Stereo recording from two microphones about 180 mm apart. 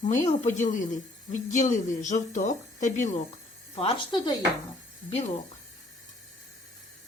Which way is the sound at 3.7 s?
30° left (ahead or behind).